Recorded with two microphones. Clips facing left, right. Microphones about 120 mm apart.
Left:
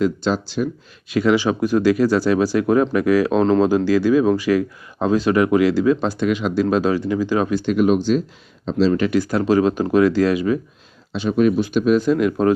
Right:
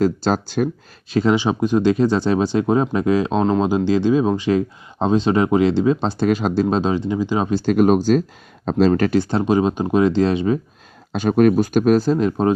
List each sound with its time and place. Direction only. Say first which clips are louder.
0.0 s speech: right 1 dB; 45° right (ahead or behind)
1.1 s speech: even; 25° right (ahead or behind)
6.2 s speech: right 2 dB; 40° right (ahead or behind)
7.6 s speech: right 2 dB; 40° right (ahead or behind)
11.1 s speech: right 2 dB; 50° right (ahead or behind); by 12.5 s 25° right (ahead or behind)